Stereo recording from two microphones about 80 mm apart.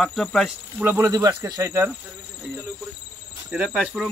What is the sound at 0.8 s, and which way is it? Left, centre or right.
Speech, right.